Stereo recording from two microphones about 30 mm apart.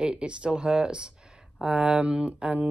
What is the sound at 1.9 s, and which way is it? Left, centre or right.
Speech, right.